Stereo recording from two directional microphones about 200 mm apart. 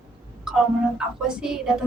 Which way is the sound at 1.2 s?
5° right (ahead or behind).